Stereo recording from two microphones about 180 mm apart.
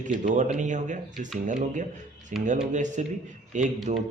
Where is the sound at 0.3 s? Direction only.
40° right (ahead or behind).